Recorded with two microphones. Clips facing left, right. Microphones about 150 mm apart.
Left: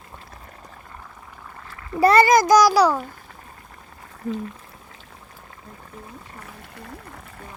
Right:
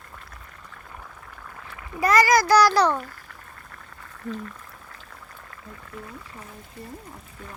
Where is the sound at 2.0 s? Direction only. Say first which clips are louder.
Left 4 dB; 30° left (ahead or behind); by 3.0 s 10° left (ahead or behind).